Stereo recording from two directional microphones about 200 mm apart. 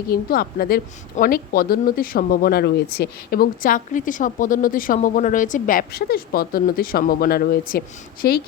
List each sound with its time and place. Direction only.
0.1 s a woman's voice: 50° left (ahead or behind)